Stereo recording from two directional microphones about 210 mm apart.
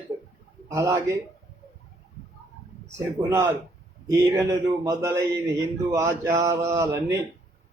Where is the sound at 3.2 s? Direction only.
10° right (ahead or behind).